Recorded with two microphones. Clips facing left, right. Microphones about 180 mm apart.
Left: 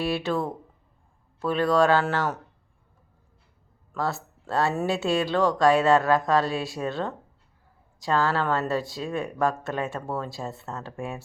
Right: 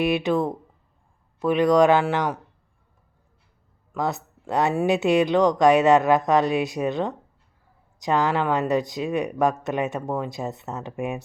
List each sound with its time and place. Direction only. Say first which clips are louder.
0.0 s speech: right 5 dB; 20° right (ahead or behind)
3.9 s speech: right 2 dB; 20° right (ahead or behind)